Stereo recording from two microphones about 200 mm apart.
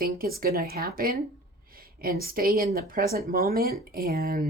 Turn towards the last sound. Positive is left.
turn(degrees=-50)  # may be behind; listen again after turning